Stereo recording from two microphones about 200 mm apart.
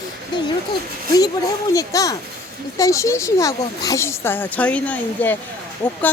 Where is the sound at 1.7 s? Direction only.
15° left (ahead or behind).